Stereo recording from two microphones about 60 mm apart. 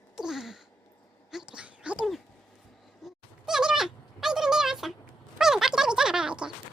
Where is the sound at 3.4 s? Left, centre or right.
Centre.